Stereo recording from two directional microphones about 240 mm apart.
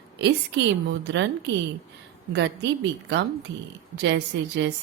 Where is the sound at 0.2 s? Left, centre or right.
Right.